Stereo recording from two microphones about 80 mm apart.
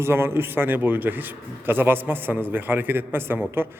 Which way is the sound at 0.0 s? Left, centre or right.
Right.